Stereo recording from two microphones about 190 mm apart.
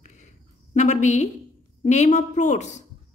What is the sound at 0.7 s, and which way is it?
A woman's voice, 40° left (ahead or behind).